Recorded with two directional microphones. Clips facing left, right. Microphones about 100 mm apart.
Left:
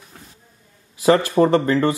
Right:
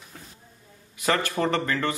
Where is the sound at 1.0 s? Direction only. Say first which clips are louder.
Left 9 dB; 30° left (ahead or behind).